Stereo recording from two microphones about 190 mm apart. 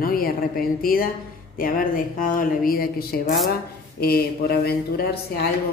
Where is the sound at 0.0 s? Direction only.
50° left (ahead or behind).